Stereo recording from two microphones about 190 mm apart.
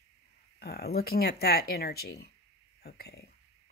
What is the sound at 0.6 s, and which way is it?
Speech, 55° left (ahead or behind).